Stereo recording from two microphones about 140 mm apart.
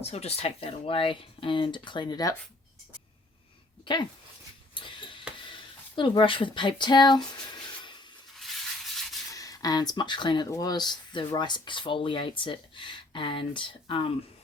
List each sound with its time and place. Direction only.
0.0 s speech: 50° left (ahead or behind); by 2.3 s 30° left (ahead or behind)
4.7 s a sound: 35° left (ahead or behind)
5.5 s speech: 35° left (ahead or behind)
8.4 s rub: centre (ahead or behind)
9.3 s speech: 25° left (ahead or behind)